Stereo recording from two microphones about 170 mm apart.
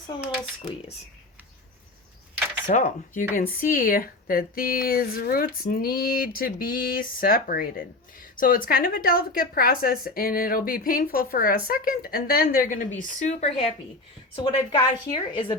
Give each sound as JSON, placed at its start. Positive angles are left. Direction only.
{"t": 0.1, "sound": "a woman's voice", "side_deg": 25}
{"t": 2.6, "sound": "speech", "side_deg": 50}
{"t": 13.0, "sound": "speech", "side_deg": 45}
{"t": 14.4, "sound": "a woman's voice", "side_deg": 25}